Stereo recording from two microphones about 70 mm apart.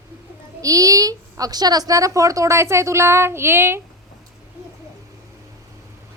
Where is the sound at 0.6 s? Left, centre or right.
Right.